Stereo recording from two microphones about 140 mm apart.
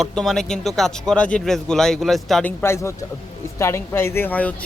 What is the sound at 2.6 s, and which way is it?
A woman's voice, 20° left (ahead or behind).